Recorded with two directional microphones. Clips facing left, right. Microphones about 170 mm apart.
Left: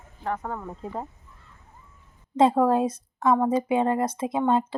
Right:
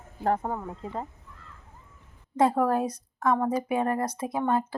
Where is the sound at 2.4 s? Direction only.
20° left (ahead or behind).